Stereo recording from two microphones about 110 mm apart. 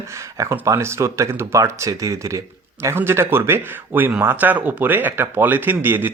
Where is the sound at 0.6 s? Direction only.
25° right (ahead or behind).